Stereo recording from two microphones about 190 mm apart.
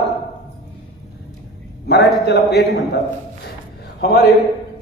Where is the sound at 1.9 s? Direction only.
60° left (ahead or behind).